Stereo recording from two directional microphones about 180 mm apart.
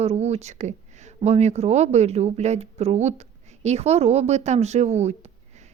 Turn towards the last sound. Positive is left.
turn(degrees=-40)  # may be behind; listen again after turning